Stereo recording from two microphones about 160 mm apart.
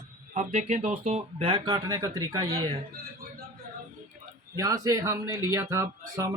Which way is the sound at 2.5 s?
35° right (ahead or behind).